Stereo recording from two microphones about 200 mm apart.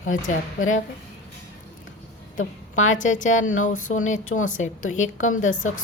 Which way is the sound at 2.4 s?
85° left.